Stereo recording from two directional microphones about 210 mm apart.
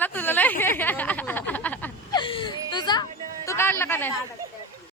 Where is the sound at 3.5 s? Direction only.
10° left (ahead or behind).